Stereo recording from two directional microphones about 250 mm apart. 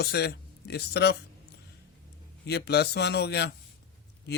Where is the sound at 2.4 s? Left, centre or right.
Left.